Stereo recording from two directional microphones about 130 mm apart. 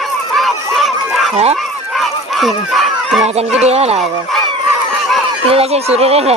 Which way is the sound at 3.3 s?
55° right (ahead or behind).